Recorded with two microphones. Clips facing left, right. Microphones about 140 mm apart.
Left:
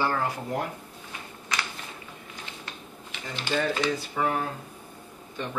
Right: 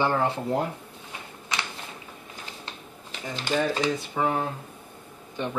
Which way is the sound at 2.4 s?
35° right (ahead or behind).